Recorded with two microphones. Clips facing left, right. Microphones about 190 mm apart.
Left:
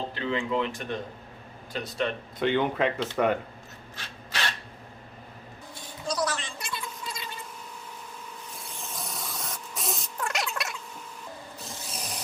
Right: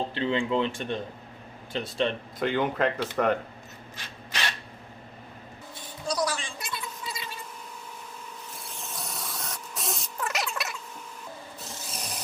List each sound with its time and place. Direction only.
0.1 s speech: 30° right (ahead or behind)
2.4 s speech: centre (ahead or behind)
6.1 s gargling: 10° right (ahead or behind)
8.5 s a sound: centre (ahead or behind)
11.6 s tools: centre (ahead or behind)